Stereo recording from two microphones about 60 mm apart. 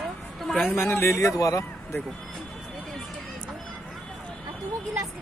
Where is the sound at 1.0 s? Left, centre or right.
Left.